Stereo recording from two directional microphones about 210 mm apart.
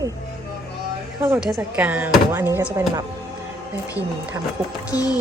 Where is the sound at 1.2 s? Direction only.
5° right (ahead or behind).